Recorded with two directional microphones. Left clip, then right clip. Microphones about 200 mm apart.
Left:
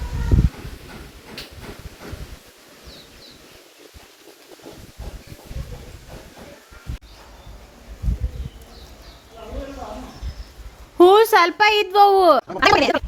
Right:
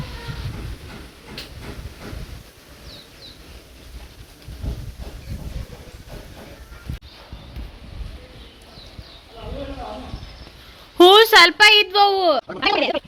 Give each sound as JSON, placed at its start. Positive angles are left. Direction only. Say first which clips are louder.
{"t": 10.9, "sound": "speech", "louder": "right 2 dB", "side_deg": 5}